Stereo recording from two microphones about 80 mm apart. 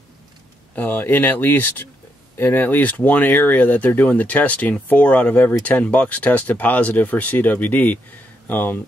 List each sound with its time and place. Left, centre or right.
0.7 s speech: left